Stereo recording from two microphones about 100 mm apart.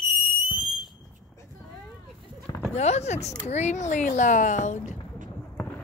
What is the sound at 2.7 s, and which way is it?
Speech, 90° left.